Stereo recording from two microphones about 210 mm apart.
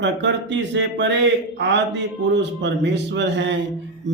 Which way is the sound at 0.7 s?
55° right (ahead or behind).